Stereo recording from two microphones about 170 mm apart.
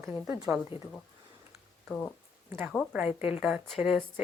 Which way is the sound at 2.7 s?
5° left (ahead or behind).